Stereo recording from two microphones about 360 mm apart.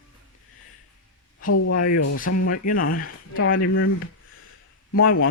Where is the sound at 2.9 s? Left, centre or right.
Left.